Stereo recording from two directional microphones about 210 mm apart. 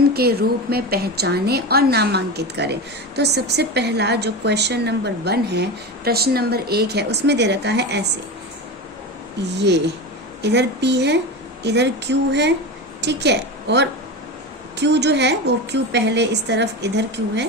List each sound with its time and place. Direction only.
0.1 s a woman's voice: 50° right (ahead or behind)
9.4 s a woman's voice: 55° right (ahead or behind)